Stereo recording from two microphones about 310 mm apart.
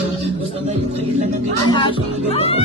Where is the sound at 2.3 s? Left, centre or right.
Centre.